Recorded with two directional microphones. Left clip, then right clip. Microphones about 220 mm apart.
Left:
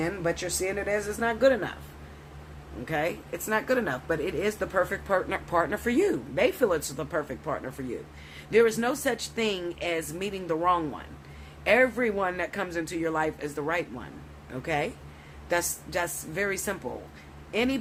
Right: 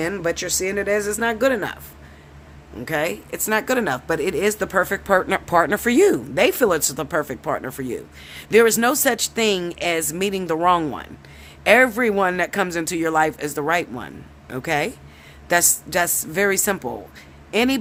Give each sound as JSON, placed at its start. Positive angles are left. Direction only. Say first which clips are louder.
{"t": 0.0, "sound": "speech", "louder": "right 6 dB", "side_deg": -50}
{"t": 2.8, "sound": "speech", "louder": "right 6 dB", "side_deg": -50}